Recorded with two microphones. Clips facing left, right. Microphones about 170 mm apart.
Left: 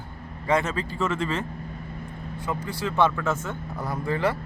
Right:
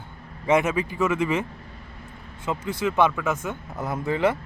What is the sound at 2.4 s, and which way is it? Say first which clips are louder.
Speech: right 4 dB; 20° right (ahead or behind).